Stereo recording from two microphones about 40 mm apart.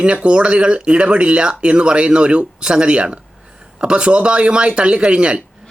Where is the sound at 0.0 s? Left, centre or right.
Right.